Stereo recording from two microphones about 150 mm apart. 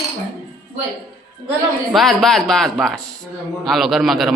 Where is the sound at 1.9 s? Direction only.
Centre (ahead or behind).